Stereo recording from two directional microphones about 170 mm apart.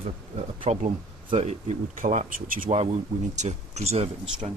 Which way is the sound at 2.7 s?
40° right (ahead or behind).